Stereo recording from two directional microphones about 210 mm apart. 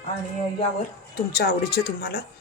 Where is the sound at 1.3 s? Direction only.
50° left (ahead or behind).